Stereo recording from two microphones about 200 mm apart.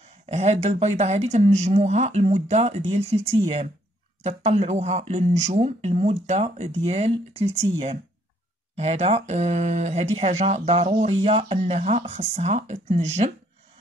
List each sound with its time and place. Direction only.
0.3 s speech: 35° right (ahead or behind)
8.7 s speech: 30° right (ahead or behind)